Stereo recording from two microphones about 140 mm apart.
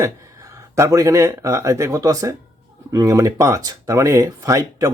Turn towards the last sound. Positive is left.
turn(degrees=-25)  # may be behind; listen again after turning